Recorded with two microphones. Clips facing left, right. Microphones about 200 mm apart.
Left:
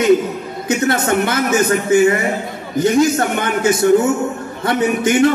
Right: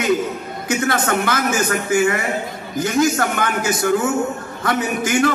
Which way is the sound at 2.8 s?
25° left (ahead or behind).